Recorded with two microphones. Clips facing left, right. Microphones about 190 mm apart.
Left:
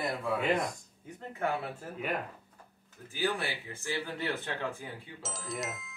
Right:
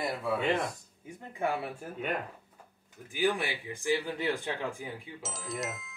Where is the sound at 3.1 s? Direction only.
15° right (ahead or behind).